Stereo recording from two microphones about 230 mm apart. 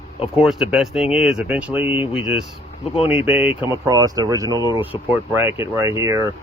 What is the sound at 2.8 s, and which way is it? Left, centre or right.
Speech, left.